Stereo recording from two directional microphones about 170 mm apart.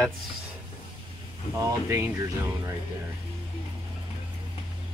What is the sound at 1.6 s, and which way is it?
Speech, 20° right (ahead or behind).